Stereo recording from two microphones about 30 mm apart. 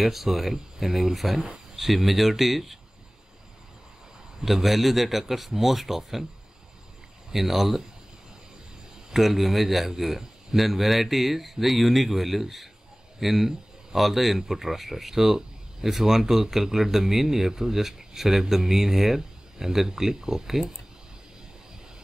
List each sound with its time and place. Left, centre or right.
0.0 s a man's voice: centre
4.5 s speech: centre
7.3 s a man's voice: centre
9.1 s a man's voice: centre